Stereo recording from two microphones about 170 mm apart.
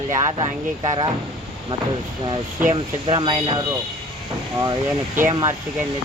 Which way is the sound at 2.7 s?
35° right (ahead or behind).